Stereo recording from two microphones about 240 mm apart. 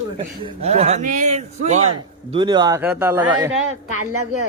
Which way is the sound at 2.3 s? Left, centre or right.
Centre.